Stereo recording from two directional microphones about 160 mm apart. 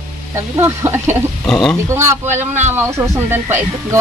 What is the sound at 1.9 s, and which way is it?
Speech, 15° right (ahead or behind).